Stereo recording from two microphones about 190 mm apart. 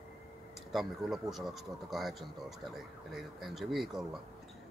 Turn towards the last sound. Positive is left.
turn(degrees=0)  # may be behind; listen again after turning